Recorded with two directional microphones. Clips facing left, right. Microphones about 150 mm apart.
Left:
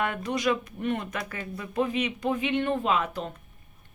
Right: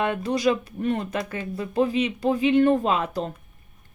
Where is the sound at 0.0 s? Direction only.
30° right (ahead or behind).